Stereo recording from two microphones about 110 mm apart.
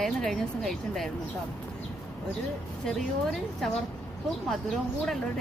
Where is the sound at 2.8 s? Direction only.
Centre (ahead or behind).